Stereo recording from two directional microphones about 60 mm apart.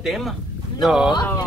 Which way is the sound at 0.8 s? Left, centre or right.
Centre.